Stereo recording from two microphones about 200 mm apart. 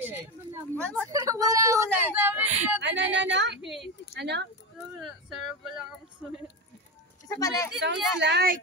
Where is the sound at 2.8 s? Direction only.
65° right (ahead or behind).